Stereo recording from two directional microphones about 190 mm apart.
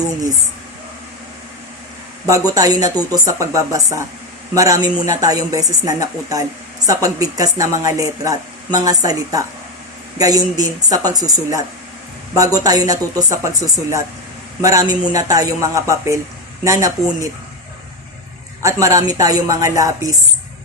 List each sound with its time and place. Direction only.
2.2 s a woman's voice: 15° right (ahead or behind)
18.6 s a woman's voice: 15° right (ahead or behind)